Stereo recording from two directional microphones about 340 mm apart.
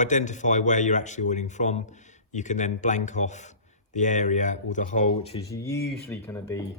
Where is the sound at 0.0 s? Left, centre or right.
Left.